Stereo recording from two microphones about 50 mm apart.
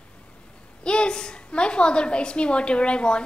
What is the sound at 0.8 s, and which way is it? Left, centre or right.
A woman's voice, centre.